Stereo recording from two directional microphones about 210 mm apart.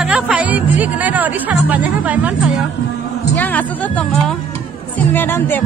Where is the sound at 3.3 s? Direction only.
10° left (ahead or behind).